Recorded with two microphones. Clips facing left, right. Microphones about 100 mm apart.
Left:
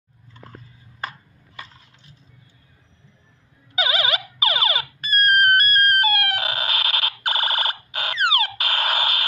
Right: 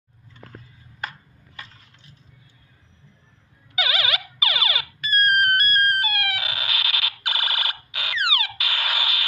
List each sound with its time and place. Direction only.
3.7 s car alarm: 30° left (ahead or behind)